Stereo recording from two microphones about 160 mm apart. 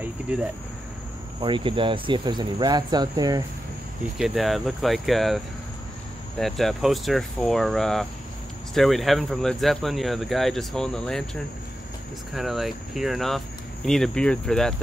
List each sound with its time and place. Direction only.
0.3 s speech: 10° right (ahead or behind)
1.4 s speech: 30° right (ahead or behind)
4.2 s speech: centre (ahead or behind)
6.4 s speech: centre (ahead or behind)